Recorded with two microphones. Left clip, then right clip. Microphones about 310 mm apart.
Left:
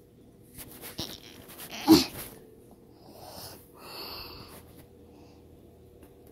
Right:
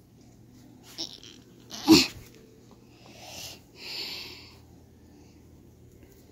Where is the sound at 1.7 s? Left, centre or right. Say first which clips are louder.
Right 2 dB; right.